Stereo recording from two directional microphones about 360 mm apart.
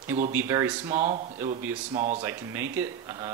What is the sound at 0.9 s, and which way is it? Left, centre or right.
Speech, centre.